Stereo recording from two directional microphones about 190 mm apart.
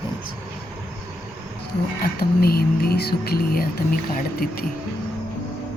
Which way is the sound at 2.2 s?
55° left (ahead or behind).